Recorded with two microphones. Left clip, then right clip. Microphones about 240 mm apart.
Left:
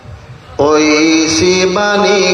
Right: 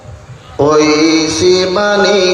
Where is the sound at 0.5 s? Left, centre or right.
Left.